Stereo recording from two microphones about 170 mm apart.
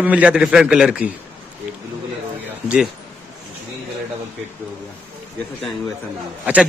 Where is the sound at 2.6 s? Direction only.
5° right (ahead or behind).